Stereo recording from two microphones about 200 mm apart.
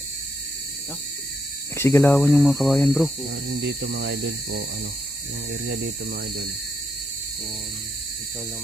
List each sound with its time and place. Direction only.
1.7 s speech: 15° left (ahead or behind)
3.6 s speech: 60° right (ahead or behind)
5.6 s speech: 55° right (ahead or behind)